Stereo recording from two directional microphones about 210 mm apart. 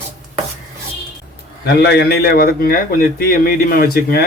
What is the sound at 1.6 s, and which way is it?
Speech, 50° left (ahead or behind).